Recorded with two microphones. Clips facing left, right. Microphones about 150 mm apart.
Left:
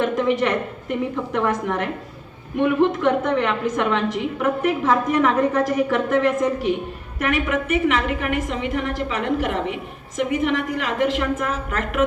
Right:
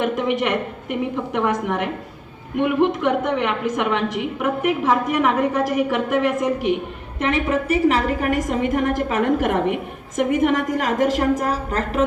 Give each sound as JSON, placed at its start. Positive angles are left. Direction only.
{"t": 0.0, "sound": "a woman's voice", "side_deg": -15}